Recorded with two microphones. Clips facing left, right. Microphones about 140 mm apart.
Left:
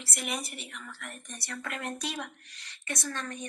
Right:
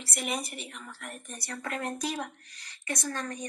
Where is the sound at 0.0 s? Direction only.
35° right (ahead or behind).